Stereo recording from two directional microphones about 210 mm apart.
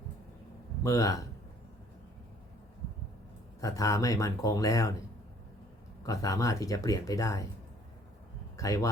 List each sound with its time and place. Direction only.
0.9 s speech: 15° left (ahead or behind)
3.6 s speech: 15° left (ahead or behind)
6.0 s speech: 15° left (ahead or behind)
8.5 s speech: 15° left (ahead or behind)